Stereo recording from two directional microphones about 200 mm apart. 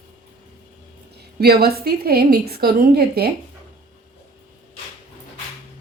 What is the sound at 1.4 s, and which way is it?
A woman's voice, 50° right (ahead or behind).